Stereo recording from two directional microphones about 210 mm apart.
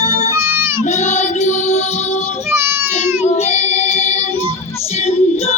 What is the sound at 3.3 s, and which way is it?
Music, 30° left (ahead or behind).